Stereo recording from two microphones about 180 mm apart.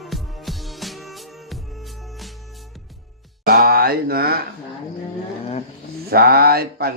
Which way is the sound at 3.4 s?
55° right (ahead or behind).